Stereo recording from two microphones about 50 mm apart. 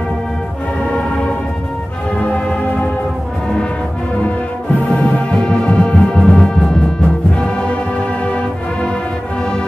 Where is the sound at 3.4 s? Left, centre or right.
Centre.